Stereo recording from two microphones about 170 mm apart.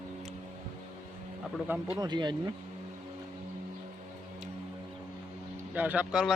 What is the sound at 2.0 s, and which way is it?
Speech, 25° right (ahead or behind).